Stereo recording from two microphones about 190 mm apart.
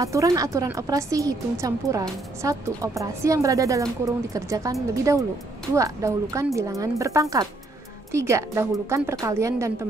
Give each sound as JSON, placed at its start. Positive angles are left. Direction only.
{"t": 0.0, "sound": "speech", "side_deg": -15}